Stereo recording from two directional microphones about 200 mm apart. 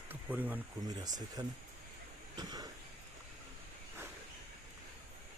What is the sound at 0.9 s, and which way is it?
Speech, 20° right (ahead or behind).